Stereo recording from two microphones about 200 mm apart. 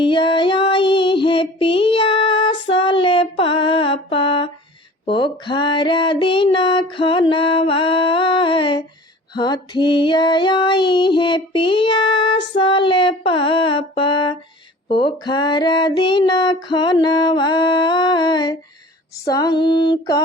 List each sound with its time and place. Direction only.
0.0 s female singing: 25° left (ahead or behind)